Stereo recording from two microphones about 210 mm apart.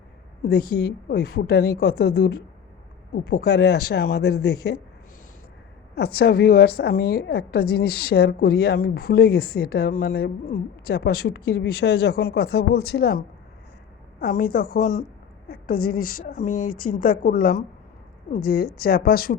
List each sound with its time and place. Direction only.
0.7 s a woman's voice: 50° left (ahead or behind)
6.1 s a woman's voice: 50° left (ahead or behind)